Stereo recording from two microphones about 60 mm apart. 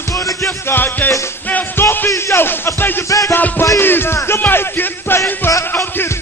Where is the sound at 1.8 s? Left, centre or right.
Left.